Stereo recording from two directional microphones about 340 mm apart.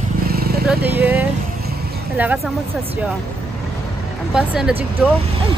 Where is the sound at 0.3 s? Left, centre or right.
Right.